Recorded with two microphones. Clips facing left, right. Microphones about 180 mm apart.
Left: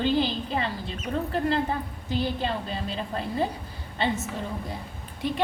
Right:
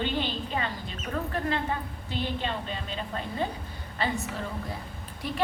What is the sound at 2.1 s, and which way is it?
A woman's voice, 40° left (ahead or behind).